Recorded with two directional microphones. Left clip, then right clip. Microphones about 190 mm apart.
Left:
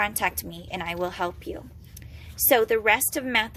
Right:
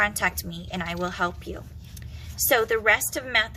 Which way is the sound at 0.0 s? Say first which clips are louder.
Right 2 dB; 25° left (ahead or behind).